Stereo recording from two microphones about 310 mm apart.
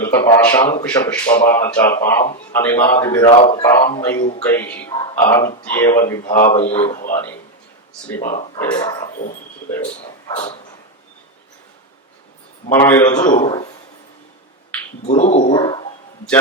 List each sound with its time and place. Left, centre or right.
0.0 s a man's voice: centre
4.2 s a man's voice: left
4.4 s a man's voice: centre
6.8 s a man's voice: left
8.2 s a man's voice: left
8.5 s a man's voice: centre
10.3 s a man's voice: centre
12.7 s a man's voice: centre
15.0 s speech: left